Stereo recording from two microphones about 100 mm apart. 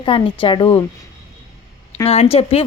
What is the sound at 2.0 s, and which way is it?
Speech, 90° left.